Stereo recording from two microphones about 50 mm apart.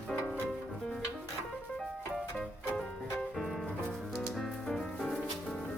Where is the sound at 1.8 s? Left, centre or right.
Centre.